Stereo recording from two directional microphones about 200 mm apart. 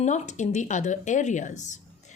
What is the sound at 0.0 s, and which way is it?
A woman's voice, 35° left (ahead or behind).